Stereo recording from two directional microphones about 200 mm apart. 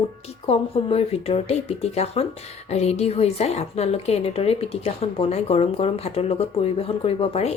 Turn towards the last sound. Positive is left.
turn(degrees=30)  # may be behind; listen again after turning